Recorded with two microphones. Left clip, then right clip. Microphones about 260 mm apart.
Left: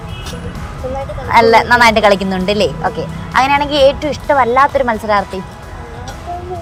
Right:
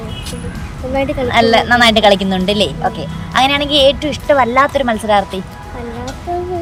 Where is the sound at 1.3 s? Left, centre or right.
Centre.